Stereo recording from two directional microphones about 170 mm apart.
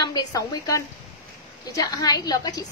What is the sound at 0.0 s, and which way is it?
A woman's voice, 25° left (ahead or behind).